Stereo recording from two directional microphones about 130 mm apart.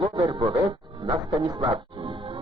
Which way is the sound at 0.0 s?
25° right (ahead or behind).